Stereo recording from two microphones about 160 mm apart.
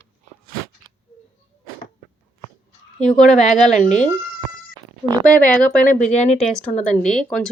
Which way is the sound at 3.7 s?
50° left (ahead or behind).